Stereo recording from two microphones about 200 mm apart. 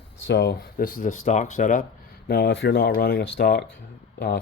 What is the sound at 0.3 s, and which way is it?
Speech, 60° left (ahead or behind).